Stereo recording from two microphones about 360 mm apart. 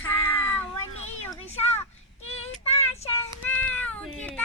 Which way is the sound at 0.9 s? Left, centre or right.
Centre.